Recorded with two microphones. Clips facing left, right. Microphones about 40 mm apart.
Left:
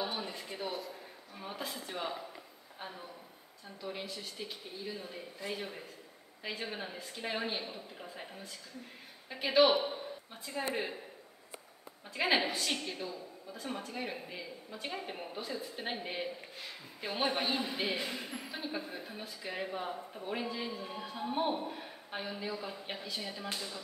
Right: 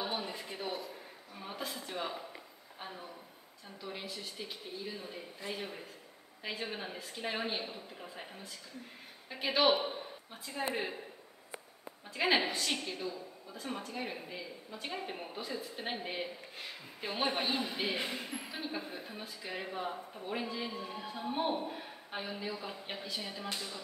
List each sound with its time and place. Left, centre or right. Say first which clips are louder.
0.0 s a sound: even; centre
3.8 s a man's voice: left 1 dB; centre
12.1 s a man's voice: even; centre
17.9 s speech: even; right
18.3 s a man's voice: even; centre